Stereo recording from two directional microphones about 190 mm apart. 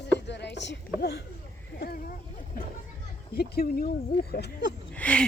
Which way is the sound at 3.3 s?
55° left (ahead or behind).